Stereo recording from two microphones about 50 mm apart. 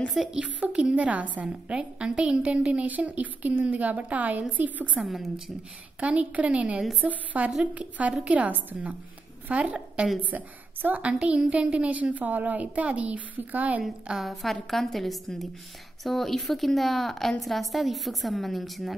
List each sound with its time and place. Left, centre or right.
0.1 s a woman's voice: centre
0.4 s a woman's voice: right
5.0 s a woman's voice: centre
5.9 s a woman's voice: right
14.1 s a woman's voice: centre